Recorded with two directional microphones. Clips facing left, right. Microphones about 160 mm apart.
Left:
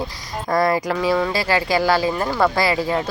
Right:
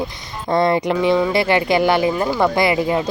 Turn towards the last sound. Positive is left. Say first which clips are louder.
# right 3 dB
turn(degrees=-20)  # may be behind; listen again after turning